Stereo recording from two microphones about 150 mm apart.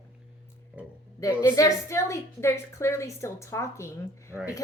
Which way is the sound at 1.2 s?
20° left (ahead or behind).